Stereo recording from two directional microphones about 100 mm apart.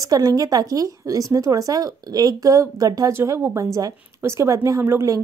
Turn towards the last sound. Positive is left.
turn(degrees=-30)  # may be behind; listen again after turning